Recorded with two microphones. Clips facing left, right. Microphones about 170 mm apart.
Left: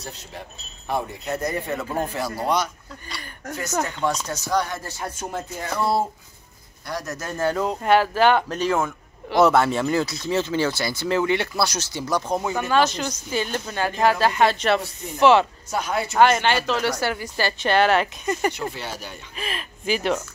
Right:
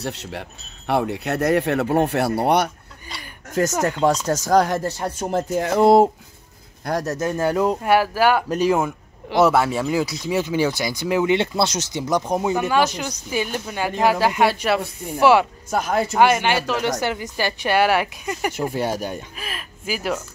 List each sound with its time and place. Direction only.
0.0 s speech: 75° right (ahead or behind)
3.8 s speech: 40° right (ahead or behind)
5.8 s speech: 90° right
6.8 s speech: 50° right (ahead or behind)
7.2 s speech: 15° right (ahead or behind)
15.7 s speech: 45° right (ahead or behind)
16.2 s speech: 10° right (ahead or behind)
18.7 s speech: 50° right (ahead or behind)
19.3 s speech: 5° right (ahead or behind)